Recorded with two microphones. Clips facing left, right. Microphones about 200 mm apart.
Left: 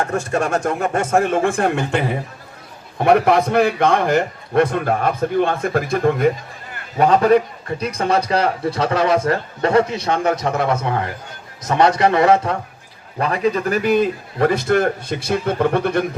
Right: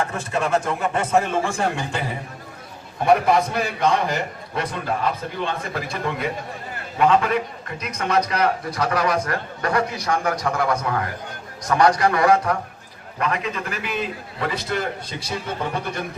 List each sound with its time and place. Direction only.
0.0 s a man's voice: 45° left (ahead or behind)
7.0 s a man's voice: 40° left (ahead or behind); by 16.0 s 60° left (ahead or behind)